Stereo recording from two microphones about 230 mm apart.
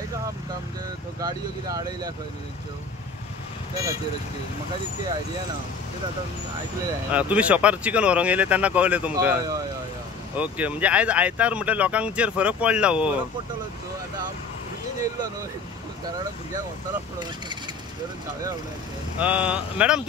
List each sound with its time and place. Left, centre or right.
1.2 s speech: centre
7.1 s speech: centre
19.1 s speech: centre